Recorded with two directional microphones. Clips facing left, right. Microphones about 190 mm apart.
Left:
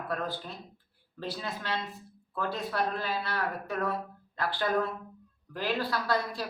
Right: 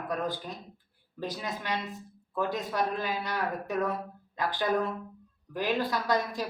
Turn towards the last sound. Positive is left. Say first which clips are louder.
# right 2 dB
turn(degrees=-15)  # may be behind; listen again after turning